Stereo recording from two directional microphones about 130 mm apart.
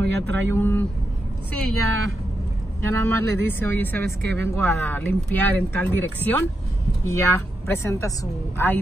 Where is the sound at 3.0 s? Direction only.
15° left (ahead or behind).